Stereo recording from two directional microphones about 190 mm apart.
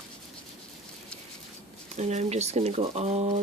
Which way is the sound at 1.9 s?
35° right (ahead or behind).